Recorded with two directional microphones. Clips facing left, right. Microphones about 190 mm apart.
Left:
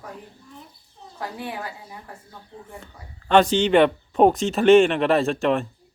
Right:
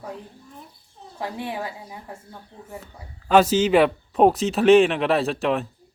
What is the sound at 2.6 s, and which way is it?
A man's voice, 5° right (ahead or behind).